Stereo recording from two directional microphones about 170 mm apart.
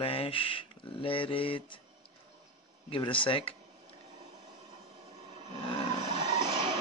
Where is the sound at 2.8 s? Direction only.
30° left (ahead or behind).